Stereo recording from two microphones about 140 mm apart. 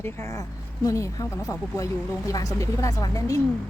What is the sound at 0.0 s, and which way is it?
Speech, 20° left (ahead or behind).